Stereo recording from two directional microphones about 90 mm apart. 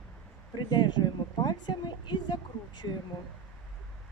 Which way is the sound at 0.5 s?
55° left (ahead or behind).